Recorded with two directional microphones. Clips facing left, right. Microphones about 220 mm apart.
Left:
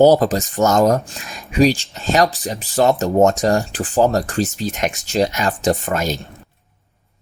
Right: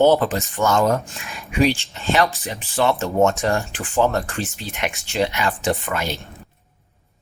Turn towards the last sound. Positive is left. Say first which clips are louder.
# left 4 dB
turn(degrees=40)  # may be behind; listen again after turning